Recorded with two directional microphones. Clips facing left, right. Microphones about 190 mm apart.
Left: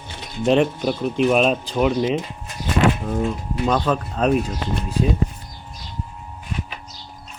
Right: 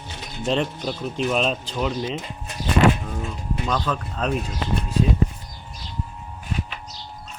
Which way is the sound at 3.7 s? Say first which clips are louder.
Left 6 dB; 20° left (ahead or behind).